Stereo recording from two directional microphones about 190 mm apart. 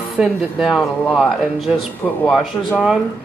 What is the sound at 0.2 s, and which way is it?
Speech, 5° right (ahead or behind).